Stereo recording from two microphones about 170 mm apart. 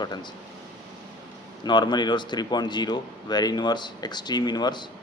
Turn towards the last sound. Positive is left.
turn(degrees=25)  # may be behind; listen again after turning